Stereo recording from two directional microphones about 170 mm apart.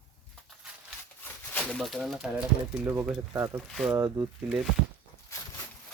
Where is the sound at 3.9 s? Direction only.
15° right (ahead or behind).